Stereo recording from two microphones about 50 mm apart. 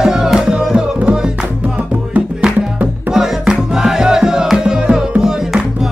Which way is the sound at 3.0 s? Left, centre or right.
Centre.